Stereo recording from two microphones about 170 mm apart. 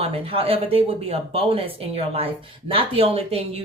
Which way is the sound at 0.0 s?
35° right (ahead or behind).